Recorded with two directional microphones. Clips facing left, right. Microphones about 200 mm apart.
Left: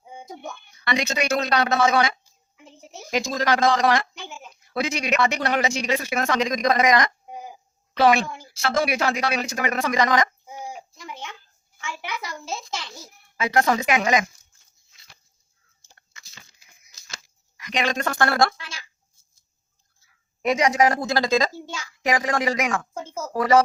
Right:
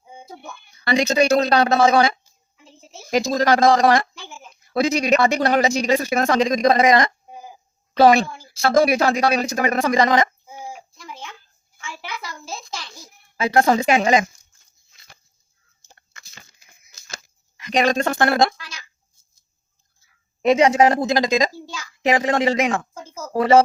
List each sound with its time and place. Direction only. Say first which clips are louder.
0.7 s speech: right 6 dB; 30° right (ahead or behind)
4.2 s a sound: left 2 dB; 20° left (ahead or behind)
4.7 s speech: right 7 dB; 35° right (ahead or behind)
10.9 s a sound: even; 20° left (ahead or behind)
11.8 s a child's voice: left 1 dB; 20° left (ahead or behind)
13.3 s a woman's voice: right 4 dB; 30° right (ahead or behind)
14.9 s dog: right 4 dB; 50° right (ahead or behind)
16.1 s a sound: right 2 dB; 50° right (ahead or behind)
17.6 s a woman's voice: right 6 dB; 35° right (ahead or behind)
18.5 s a child's voice: even; 25° left (ahead or behind)
20.4 s a woman's voice: right 5 dB; 30° right (ahead or behind)
21.5 s a child's voice: even; 25° left (ahead or behind)
22.0 s a woman's voice: right 5 dB; 25° right (ahead or behind)